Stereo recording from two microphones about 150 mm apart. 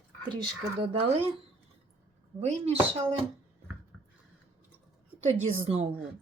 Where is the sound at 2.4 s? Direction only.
45° right (ahead or behind).